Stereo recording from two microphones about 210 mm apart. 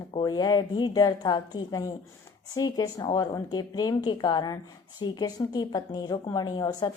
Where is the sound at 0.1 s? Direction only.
20° left (ahead or behind).